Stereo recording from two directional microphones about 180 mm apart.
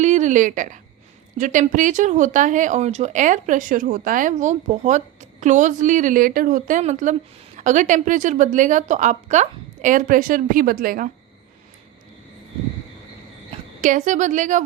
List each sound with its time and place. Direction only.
0.0 s speech: 40° right (ahead or behind)
13.5 s a woman's voice: 45° right (ahead or behind)